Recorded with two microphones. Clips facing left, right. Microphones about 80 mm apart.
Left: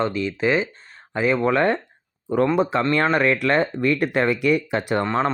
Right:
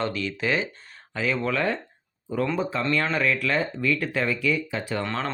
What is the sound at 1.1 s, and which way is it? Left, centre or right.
Speech, left.